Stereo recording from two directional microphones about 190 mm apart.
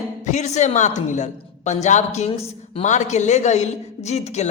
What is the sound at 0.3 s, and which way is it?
A woman's voice, 40° left (ahead or behind).